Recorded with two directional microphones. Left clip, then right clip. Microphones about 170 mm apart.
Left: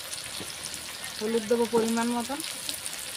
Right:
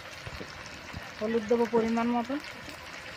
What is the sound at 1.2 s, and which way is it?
Speech, 25° left (ahead or behind).